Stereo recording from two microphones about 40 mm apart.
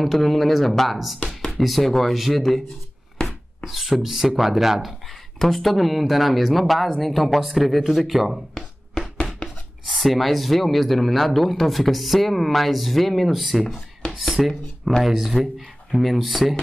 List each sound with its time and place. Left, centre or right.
0.0 s speech: centre
3.3 s chopping: centre
4.0 s speech: centre
5.0 s speech: centre
9.8 s speech: centre
14.0 s a sound: left
15.0 s speech: centre